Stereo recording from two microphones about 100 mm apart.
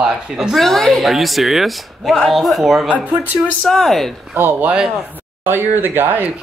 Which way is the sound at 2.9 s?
15° right (ahead or behind).